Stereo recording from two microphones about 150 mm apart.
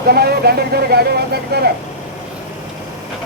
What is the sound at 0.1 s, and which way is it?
Speech, 90° right.